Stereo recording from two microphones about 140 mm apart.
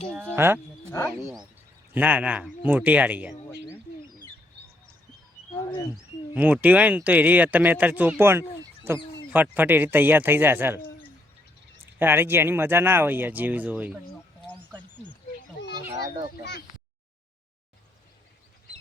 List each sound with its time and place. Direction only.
0.2 s speech: 15° right (ahead or behind)
0.9 s speech: 20° left (ahead or behind)
1.9 s speech: 10° right (ahead or behind)
6.3 s speech: 10° right (ahead or behind)
11.9 s speech: 15° right (ahead or behind)